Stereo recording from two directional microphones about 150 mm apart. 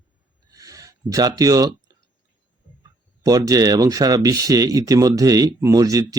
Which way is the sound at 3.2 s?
25° right (ahead or behind).